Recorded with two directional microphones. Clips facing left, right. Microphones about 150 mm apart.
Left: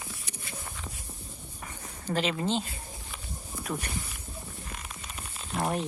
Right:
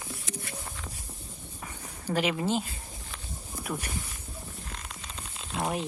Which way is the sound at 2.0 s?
15° right (ahead or behind).